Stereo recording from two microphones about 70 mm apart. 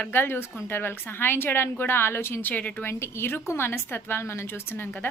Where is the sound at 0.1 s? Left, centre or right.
Left.